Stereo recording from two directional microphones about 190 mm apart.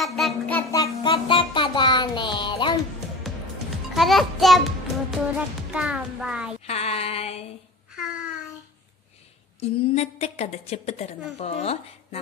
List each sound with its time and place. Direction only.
0.0 s a sound: centre (ahead or behind); by 1.1 s 15° left (ahead or behind)
1.1 s music: 25° left (ahead or behind)
3.3 s music: centre (ahead or behind)
5.7 s a child's voice: 5° right (ahead or behind)
6.6 s a sound: 35° left (ahead or behind)
9.6 s a woman's voice: 35° left (ahead or behind)